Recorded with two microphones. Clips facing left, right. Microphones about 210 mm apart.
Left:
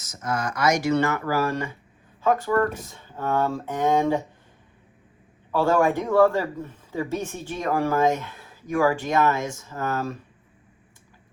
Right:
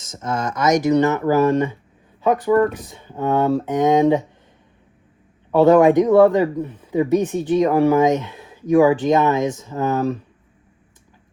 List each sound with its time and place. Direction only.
0.0 s speech: 25° right (ahead or behind)
5.5 s speech: 20° right (ahead or behind)